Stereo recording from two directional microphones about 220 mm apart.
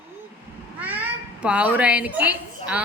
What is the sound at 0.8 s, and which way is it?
A child's voice, 5° right (ahead or behind).